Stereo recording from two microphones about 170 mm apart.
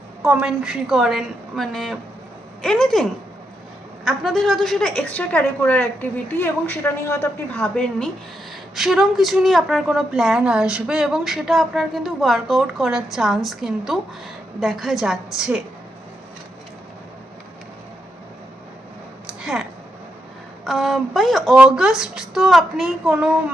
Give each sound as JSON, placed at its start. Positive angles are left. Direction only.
{"t": 0.2, "sound": "a woman's voice", "side_deg": -5}
{"t": 19.4, "sound": "a sound", "side_deg": 0}
{"t": 20.7, "sound": "a woman's voice", "side_deg": 0}